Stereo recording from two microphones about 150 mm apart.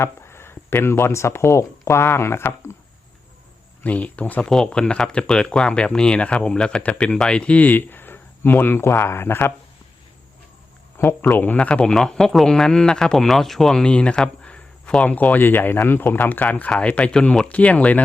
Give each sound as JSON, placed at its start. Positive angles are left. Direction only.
{"t": 0.0, "sound": "speech", "side_deg": 15}
{"t": 3.8, "sound": "speech", "side_deg": 10}
{"t": 10.9, "sound": "speech", "side_deg": 15}